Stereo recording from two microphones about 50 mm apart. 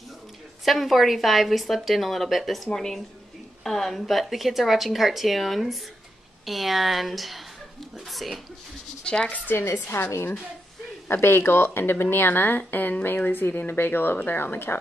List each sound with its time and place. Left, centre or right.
0.7 s a woman's voice: centre
9.0 s speech: centre
9.6 s speech: left
10.0 s a woman's voice: left
11.1 s speech: left